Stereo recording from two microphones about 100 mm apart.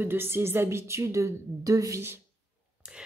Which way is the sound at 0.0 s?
25° right (ahead or behind).